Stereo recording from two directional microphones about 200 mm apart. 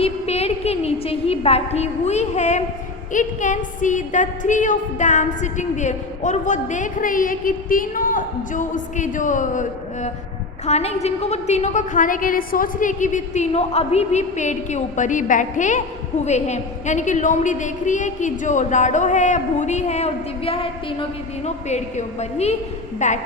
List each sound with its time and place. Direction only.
0.0 s a woman's voice: 30° left (ahead or behind)